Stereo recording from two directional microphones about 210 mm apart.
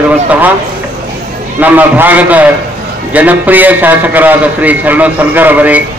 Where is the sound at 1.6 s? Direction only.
10° right (ahead or behind).